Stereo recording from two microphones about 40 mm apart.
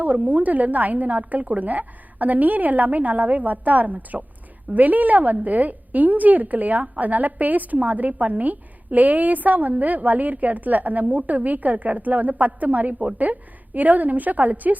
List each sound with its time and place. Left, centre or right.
0.0 s a woman's voice: right